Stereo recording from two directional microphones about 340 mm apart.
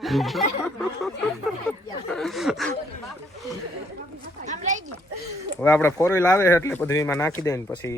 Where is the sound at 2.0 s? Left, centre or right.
Centre.